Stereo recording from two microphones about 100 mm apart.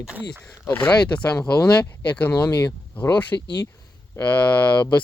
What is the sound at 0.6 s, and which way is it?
Speech, 20° left (ahead or behind).